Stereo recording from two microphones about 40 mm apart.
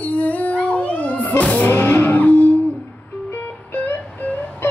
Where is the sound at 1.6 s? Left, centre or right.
Left.